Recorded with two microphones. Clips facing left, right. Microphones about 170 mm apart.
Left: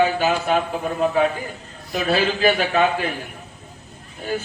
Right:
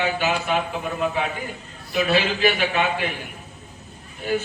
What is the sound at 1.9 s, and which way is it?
A man's voice, 40° left (ahead or behind).